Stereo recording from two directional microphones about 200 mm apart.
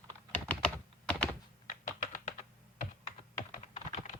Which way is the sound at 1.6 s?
40° left (ahead or behind).